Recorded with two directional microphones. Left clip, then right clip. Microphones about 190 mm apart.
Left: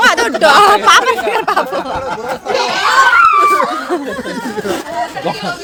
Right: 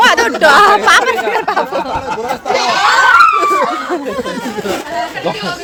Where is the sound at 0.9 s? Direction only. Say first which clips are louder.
Left 1 dB; 5° left (ahead or behind).